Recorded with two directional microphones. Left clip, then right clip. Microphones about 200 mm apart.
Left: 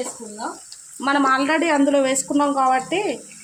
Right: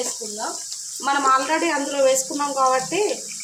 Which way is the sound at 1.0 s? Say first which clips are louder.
Even; 50° left (ahead or behind).